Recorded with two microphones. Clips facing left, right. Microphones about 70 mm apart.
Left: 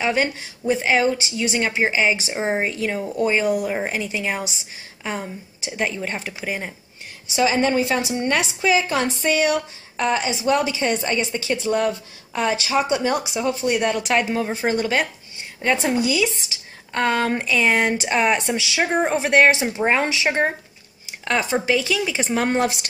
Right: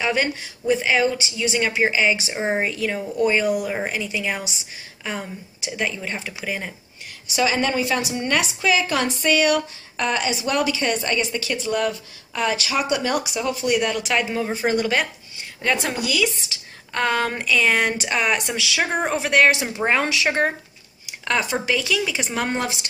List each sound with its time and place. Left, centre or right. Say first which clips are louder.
0.0 s speech: left 1 dB; left